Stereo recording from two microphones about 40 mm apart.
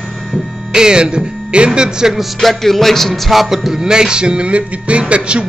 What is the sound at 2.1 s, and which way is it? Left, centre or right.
Music, centre.